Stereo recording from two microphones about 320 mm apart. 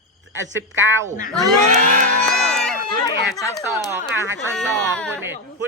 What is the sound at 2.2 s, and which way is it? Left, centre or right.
Music, centre.